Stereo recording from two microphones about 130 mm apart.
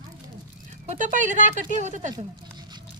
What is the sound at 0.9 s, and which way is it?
Speech, 75° right (ahead or behind).